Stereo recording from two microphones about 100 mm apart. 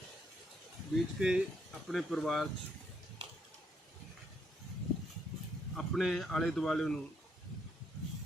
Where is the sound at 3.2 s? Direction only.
60° right (ahead or behind).